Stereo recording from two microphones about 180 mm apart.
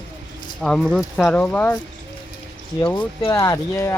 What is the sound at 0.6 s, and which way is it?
Speech, 5° left (ahead or behind).